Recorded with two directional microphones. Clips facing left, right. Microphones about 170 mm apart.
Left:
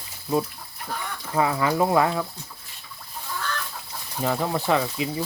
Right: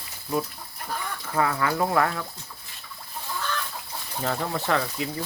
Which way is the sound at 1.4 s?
15° left (ahead or behind).